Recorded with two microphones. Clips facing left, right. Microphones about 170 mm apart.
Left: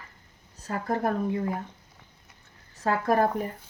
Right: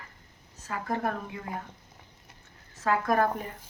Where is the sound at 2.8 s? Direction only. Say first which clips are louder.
Left 2 dB; 35° left (ahead or behind).